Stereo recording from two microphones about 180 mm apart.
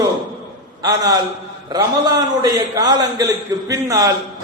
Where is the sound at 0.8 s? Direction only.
20° right (ahead or behind).